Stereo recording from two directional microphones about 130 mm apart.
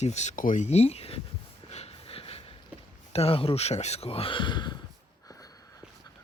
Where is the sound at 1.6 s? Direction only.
50° left (ahead or behind).